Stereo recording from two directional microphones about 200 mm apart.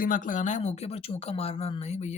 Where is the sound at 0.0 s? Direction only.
40° left (ahead or behind).